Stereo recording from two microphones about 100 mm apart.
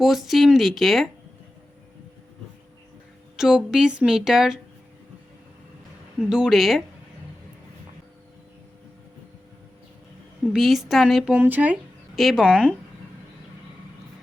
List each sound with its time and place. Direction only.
0.0 s speech: centre (ahead or behind)
3.3 s speech: 5° right (ahead or behind)
6.2 s speech: 5° right (ahead or behind)
10.4 s speech: centre (ahead or behind)
12.1 s speech: centre (ahead or behind)
12.5 s speech: 10° right (ahead or behind)